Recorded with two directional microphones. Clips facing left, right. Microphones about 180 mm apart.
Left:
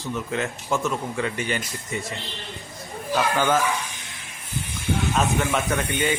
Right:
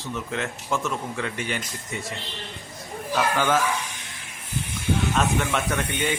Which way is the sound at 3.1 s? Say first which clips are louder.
Left 1 dB; centre (ahead or behind).